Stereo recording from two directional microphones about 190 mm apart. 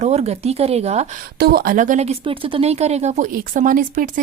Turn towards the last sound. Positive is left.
turn(degrees=-45)  # may be behind; listen again after turning